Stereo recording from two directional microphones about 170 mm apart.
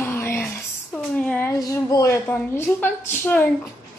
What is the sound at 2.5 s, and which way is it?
A woman's voice, 15° left (ahead or behind).